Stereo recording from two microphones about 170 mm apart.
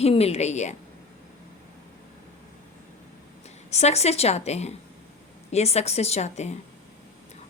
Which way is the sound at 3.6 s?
40° left (ahead or behind).